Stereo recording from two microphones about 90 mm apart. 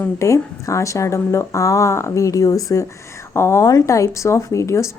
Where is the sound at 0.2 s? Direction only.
35° left (ahead or behind).